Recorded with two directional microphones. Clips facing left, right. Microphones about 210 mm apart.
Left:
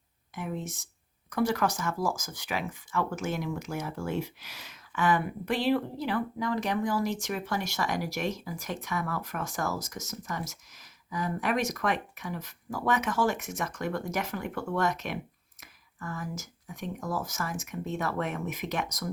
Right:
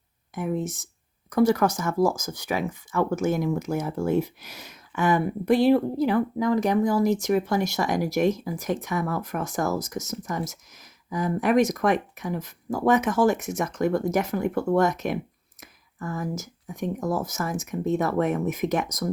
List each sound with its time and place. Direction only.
0.3 s speech: 45° right (ahead or behind)
11.1 s speech: 45° right (ahead or behind)